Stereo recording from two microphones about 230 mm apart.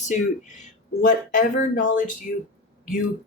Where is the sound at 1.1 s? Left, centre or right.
Left.